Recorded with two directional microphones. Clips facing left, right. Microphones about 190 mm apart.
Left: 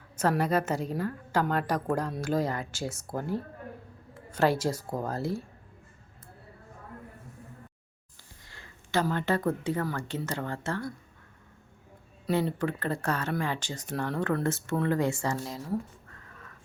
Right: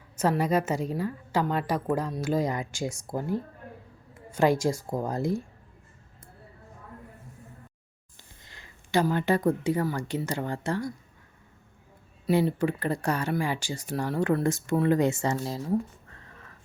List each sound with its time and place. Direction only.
0.2 s speech: 10° right (ahead or behind)
8.4 s speech: 15° right (ahead or behind)
12.2 s speech: 10° right (ahead or behind)